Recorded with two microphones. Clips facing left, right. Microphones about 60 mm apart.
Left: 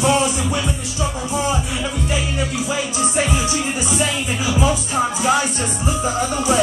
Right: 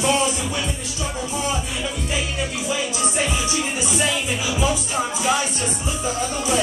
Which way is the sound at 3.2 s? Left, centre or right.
Left.